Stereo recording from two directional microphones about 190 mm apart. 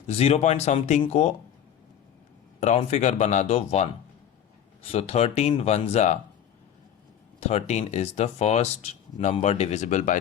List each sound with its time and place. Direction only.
0.1 s speech: 35° left (ahead or behind)
2.6 s speech: 35° left (ahead or behind)
7.3 s speech: 35° left (ahead or behind)